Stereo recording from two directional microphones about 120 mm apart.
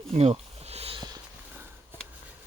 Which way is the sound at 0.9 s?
35° right (ahead or behind).